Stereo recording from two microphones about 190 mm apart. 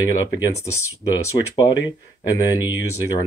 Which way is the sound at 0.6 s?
15° left (ahead or behind).